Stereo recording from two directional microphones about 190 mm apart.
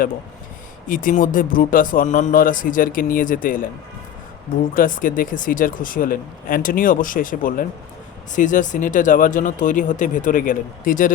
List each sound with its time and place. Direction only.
0.9 s speech: 45° left (ahead or behind)
4.7 s speech: 45° left (ahead or behind)